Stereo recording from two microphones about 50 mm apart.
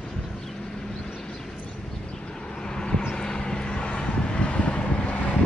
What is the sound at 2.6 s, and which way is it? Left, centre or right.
Vehicle, centre.